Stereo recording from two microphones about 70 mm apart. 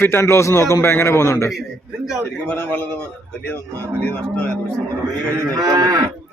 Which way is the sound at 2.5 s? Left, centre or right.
Left.